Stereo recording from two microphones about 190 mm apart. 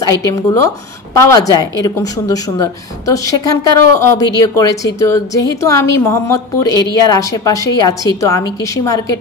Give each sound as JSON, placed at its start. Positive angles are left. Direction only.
{"t": 0.1, "sound": "a woman's voice", "side_deg": 15}